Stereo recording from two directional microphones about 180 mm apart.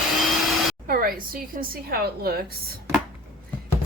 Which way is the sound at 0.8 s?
55° right (ahead or behind).